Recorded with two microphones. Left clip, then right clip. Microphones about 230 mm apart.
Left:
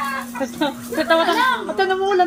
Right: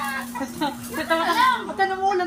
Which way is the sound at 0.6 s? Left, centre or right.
Left.